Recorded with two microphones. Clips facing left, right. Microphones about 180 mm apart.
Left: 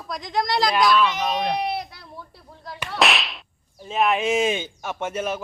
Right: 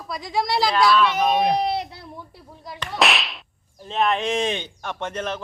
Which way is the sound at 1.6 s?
30° right (ahead or behind).